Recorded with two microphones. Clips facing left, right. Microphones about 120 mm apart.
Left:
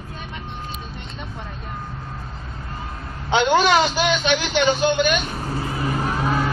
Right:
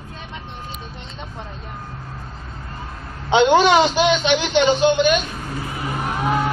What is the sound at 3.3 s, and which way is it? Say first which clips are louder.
A man's voice: right 3 dB; 20° right (ahead or behind).